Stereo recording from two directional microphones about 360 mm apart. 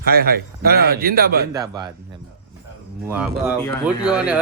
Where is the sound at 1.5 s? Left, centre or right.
Centre.